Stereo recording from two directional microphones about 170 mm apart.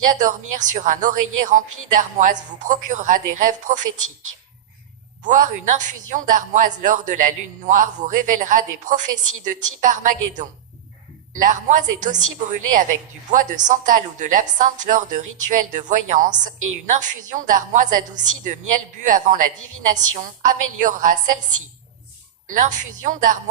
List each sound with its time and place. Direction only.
0.2 s a woman's voice: 50° right (ahead or behind)
5.2 s a woman's voice: 50° right (ahead or behind)
22.4 s a woman's voice: 50° right (ahead or behind)